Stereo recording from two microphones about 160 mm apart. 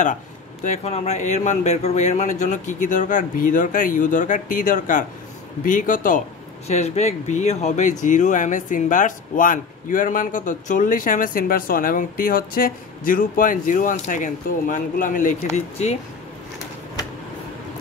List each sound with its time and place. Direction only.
0.7 s speech: 45° left (ahead or behind)